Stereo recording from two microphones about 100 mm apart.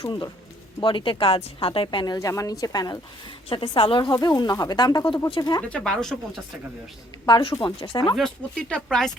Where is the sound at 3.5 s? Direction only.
60° left (ahead or behind); by 5.2 s 45° left (ahead or behind).